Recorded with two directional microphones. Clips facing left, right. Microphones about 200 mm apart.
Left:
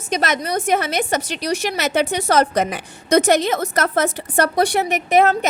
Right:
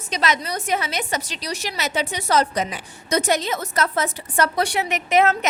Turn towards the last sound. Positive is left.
turn(degrees=35)  # may be behind; listen again after turning